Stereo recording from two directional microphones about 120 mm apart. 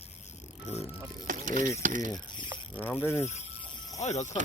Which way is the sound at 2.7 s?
15° left (ahead or behind).